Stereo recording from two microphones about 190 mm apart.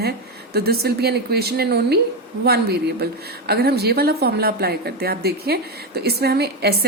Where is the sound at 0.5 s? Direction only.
55° right (ahead or behind).